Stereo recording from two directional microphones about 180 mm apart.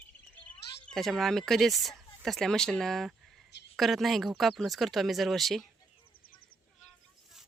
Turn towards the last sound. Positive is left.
turn(degrees=0)  # may be behind; listen again after turning